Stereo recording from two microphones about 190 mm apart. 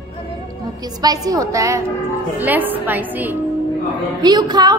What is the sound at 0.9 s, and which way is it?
A woman's voice, 20° right (ahead or behind).